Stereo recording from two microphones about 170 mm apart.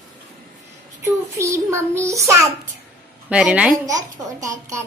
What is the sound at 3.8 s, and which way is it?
Speech, 20° right (ahead or behind).